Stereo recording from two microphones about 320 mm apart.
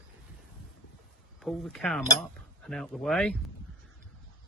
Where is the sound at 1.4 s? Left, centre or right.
Centre.